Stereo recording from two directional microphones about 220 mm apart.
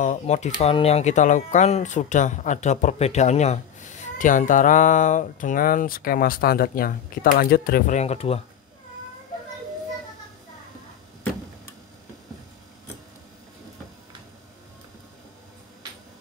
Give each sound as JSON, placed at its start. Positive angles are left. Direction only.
{"t": 0.0, "sound": "speech", "side_deg": 30}